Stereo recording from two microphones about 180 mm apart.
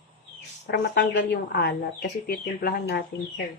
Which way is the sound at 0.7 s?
65° left (ahead or behind).